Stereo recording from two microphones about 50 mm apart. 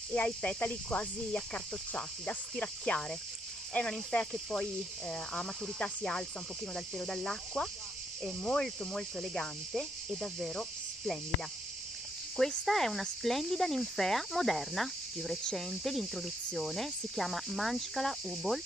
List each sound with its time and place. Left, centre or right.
0.1 s speech: left
3.8 s speech: left
4.1 s speech: centre
10.5 s cricket: centre
12.4 s speech: centre